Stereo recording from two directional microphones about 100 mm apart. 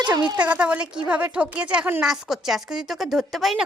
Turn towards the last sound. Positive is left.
turn(degrees=0)  # may be behind; listen again after turning